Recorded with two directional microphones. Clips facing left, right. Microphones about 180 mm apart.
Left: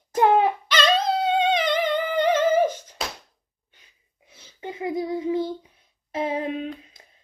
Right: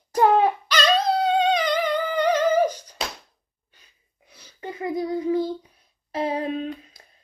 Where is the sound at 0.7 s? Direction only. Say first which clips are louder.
Right 1 dB; 25° left (ahead or behind).